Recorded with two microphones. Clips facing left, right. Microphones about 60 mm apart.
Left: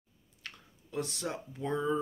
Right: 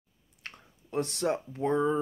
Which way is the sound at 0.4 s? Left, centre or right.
Right.